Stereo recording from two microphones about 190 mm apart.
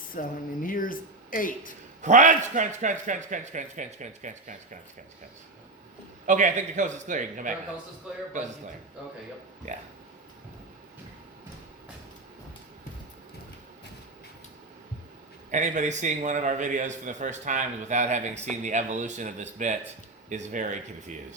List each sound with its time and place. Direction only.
0.1 s speech: 45° left (ahead or behind)
2.0 s a man's voice: 40° right (ahead or behind)
6.2 s a man's voice: 40° right (ahead or behind)
15.4 s a man's voice: 40° right (ahead or behind)